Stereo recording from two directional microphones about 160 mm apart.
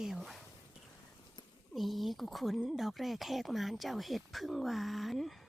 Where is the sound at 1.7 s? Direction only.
Centre (ahead or behind).